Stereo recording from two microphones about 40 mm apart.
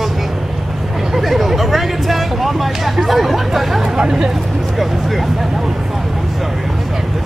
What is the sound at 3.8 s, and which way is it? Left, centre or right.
Speech, centre.